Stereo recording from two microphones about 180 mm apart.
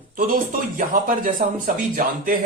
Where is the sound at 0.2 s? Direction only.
50° right (ahead or behind).